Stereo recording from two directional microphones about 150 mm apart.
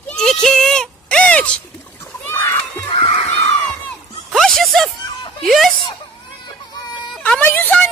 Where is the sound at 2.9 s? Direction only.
30° left (ahead or behind).